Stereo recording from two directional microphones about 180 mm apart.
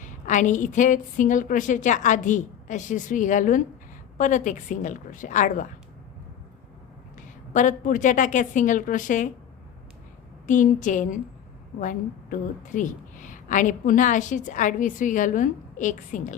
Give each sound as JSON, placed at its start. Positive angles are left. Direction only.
{"t": 0.0, "sound": "a woman's voice", "side_deg": 45}
{"t": 7.2, "sound": "a woman's voice", "side_deg": 45}
{"t": 10.4, "sound": "a woman's voice", "side_deg": 45}